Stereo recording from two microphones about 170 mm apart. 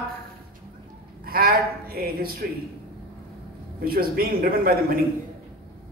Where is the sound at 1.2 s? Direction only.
60° right (ahead or behind).